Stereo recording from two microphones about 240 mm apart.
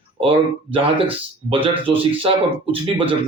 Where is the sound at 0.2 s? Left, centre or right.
Right.